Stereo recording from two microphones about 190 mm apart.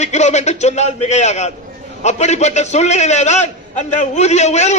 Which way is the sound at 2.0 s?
35° left (ahead or behind).